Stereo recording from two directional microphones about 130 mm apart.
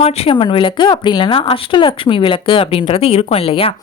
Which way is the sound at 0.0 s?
50° left (ahead or behind).